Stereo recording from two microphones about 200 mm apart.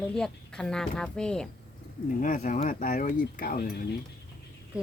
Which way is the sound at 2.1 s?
40° left (ahead or behind).